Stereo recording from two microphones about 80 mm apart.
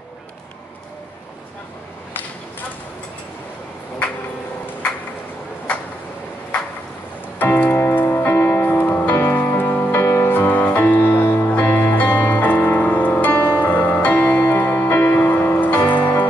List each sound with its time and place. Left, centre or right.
7.3 s music: left